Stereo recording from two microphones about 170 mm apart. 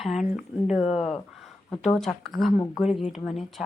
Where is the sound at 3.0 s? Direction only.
40° left (ahead or behind).